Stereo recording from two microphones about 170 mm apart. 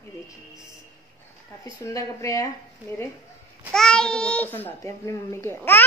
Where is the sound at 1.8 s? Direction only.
20° left (ahead or behind).